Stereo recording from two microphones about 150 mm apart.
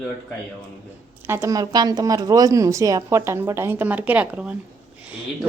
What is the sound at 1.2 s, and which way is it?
A woman's voice, 15° right (ahead or behind).